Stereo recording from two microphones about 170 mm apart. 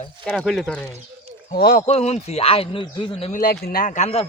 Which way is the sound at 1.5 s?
65° left (ahead or behind).